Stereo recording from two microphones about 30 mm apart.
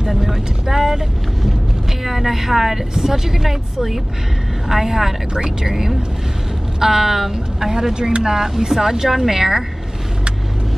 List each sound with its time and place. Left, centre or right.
0.1 s speech: centre
5.3 s speech: right
7.9 s speech: right
8.2 s speech: centre